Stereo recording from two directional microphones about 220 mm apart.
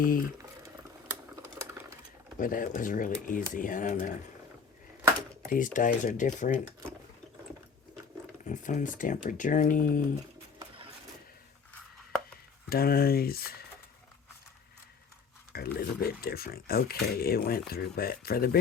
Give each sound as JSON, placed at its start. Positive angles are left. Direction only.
{"t": 2.4, "sound": "speech", "side_deg": 40}
{"t": 5.5, "sound": "speech", "side_deg": 35}
{"t": 8.4, "sound": "speech", "side_deg": 35}
{"t": 12.6, "sound": "speech", "side_deg": 45}
{"t": 15.5, "sound": "speech", "side_deg": 45}